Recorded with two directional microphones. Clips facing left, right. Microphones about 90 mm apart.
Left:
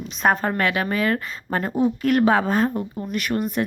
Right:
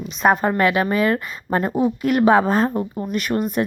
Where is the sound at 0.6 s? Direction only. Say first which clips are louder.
Right 4 dB; 20° right (ahead or behind).